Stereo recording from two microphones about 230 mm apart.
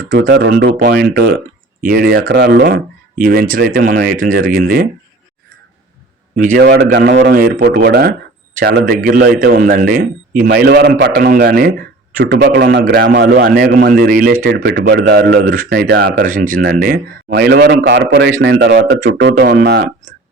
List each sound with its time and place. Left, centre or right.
0.1 s speech: right
6.3 s speech: right